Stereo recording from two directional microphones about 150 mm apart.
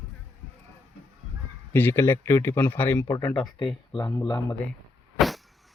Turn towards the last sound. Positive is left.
turn(degrees=0)  # may be behind; listen again after turning